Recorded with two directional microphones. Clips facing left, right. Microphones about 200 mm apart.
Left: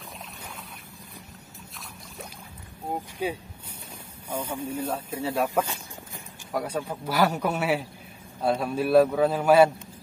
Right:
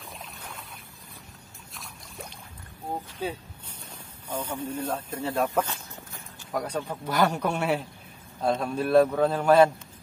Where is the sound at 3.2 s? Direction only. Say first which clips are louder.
Left 3 dB; 10° left (ahead or behind).